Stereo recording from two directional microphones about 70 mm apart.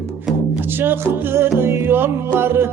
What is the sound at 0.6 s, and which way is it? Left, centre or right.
Music, right.